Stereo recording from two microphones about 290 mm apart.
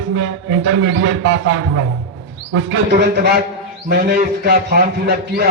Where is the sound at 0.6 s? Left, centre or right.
Right.